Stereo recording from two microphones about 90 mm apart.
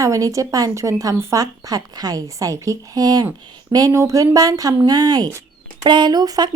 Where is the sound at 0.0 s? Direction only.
35° right (ahead or behind).